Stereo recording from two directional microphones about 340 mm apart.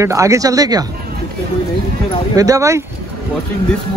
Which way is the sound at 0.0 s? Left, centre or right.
Centre.